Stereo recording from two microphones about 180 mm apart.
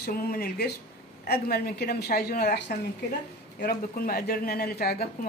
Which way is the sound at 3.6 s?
55° left (ahead or behind).